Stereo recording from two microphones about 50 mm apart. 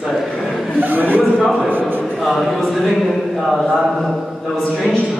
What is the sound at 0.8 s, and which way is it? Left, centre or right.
Speech, right.